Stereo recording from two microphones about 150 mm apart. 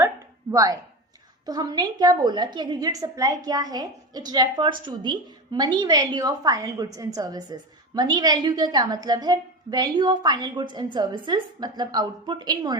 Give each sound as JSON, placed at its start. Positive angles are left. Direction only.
{"t": 0.5, "sound": "a woman's voice", "side_deg": -25}